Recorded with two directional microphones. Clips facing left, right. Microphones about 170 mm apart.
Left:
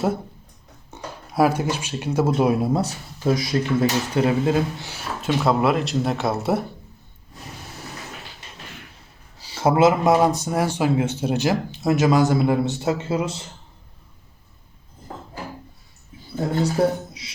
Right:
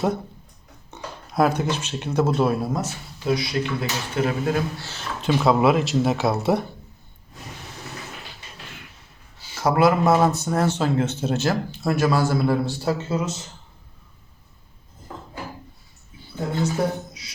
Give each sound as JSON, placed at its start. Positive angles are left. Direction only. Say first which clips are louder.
{"t": 0.9, "sound": "speech", "louder": "left 1 dB", "side_deg": 5}
{"t": 2.7, "sound": "speech", "louder": "left 4 dB", "side_deg": 40}
{"t": 4.3, "sound": "a man's voice", "louder": "left 4 dB", "side_deg": 25}
{"t": 4.9, "sound": "speech", "louder": "left 1 dB", "side_deg": 10}
{"t": 5.3, "sound": "speech", "louder": "right 2 dB", "side_deg": 0}
{"t": 9.4, "sound": "speech", "louder": "left 2 dB", "side_deg": 30}
{"t": 16.7, "sound": "speech", "louder": "left 4 dB", "side_deg": 30}